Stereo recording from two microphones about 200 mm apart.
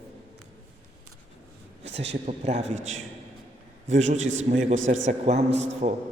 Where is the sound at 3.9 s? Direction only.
35° right (ahead or behind).